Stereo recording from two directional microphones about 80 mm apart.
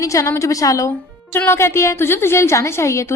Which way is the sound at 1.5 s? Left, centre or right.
Left.